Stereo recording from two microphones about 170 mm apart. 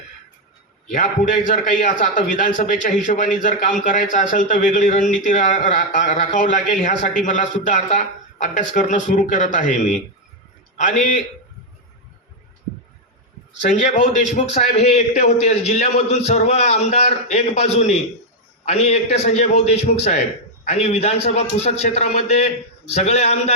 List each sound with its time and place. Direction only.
0.9 s a man's voice: 50° left (ahead or behind)
13.6 s a man's voice: 50° left (ahead or behind)